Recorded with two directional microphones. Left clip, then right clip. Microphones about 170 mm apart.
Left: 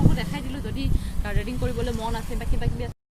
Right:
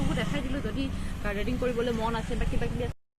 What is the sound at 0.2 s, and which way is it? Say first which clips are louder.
Vehicle: even; 30° left (ahead or behind).